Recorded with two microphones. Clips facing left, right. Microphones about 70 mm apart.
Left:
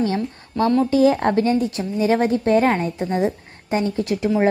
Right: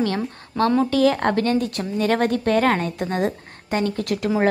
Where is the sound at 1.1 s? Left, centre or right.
Right.